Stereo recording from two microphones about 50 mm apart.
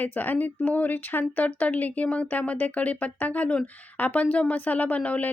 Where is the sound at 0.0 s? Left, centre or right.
Left.